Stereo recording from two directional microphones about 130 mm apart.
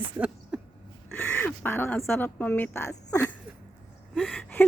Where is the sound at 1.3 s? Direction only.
15° left (ahead or behind).